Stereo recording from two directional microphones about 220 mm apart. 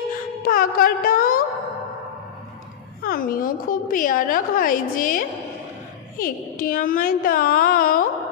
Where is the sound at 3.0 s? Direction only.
40° left (ahead or behind).